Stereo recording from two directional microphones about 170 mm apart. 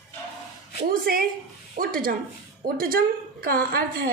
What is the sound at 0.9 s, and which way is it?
A woman's voice, 60° right (ahead or behind).